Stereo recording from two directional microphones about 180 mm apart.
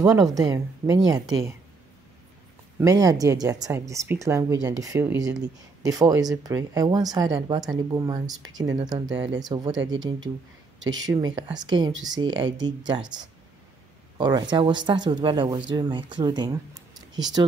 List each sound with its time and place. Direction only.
0.0 s speech: 20° right (ahead or behind)
2.8 s speech: 20° right (ahead or behind)
14.1 s speech: 25° right (ahead or behind)